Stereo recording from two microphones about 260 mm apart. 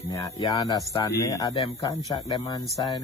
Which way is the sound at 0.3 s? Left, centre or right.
Centre.